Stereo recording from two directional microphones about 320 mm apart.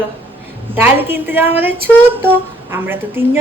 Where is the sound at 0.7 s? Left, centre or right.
Centre.